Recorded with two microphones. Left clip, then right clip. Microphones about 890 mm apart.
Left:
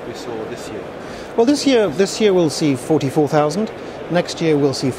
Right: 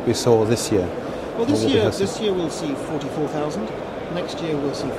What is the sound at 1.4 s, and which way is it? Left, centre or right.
Speech, left.